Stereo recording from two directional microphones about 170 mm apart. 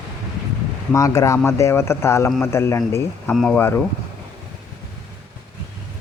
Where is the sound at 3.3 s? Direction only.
5° left (ahead or behind).